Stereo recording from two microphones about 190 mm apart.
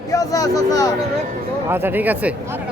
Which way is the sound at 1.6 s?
10° right (ahead or behind).